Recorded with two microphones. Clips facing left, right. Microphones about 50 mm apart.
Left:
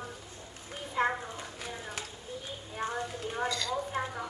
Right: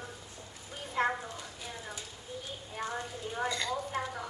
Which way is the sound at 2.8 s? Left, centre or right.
Left.